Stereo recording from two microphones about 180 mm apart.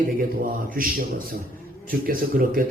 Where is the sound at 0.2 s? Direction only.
50° right (ahead or behind).